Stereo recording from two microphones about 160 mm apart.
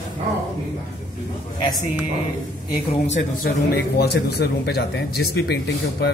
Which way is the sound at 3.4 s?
85° left.